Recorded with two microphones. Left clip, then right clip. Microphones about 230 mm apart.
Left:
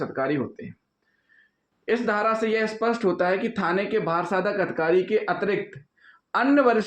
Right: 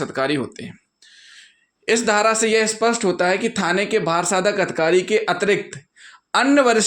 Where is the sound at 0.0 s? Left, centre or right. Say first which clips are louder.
Right 4 dB; right.